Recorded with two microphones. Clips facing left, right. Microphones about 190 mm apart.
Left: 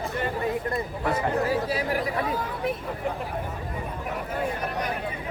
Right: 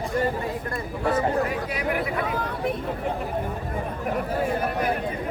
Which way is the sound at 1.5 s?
30° left (ahead or behind).